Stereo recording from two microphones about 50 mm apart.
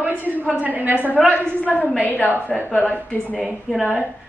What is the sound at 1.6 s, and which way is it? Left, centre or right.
A woman's voice, left.